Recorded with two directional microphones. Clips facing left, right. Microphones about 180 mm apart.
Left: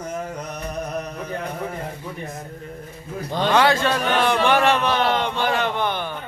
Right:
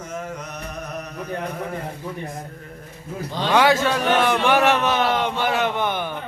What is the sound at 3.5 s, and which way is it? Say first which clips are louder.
Speech: right 1 dB; 10° right (ahead or behind).